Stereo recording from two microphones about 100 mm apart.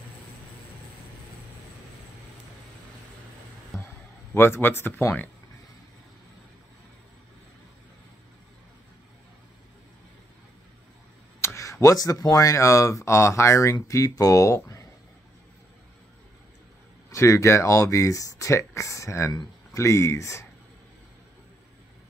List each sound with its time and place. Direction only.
3.7 s a sound: 25° left (ahead or behind)
11.4 s speech: 30° left (ahead or behind)
17.1 s speech: 30° left (ahead or behind)